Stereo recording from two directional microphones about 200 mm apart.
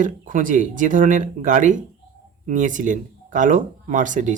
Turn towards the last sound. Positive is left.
turn(degrees=-40)  # may be behind; listen again after turning